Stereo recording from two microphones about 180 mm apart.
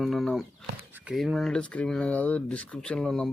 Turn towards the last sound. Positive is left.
turn(degrees=5)  # may be behind; listen again after turning